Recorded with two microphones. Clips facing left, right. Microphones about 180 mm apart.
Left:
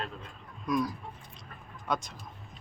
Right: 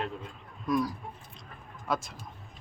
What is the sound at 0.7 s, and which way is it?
Speech, 5° right (ahead or behind).